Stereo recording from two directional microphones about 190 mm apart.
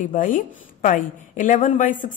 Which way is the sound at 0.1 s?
45° left (ahead or behind).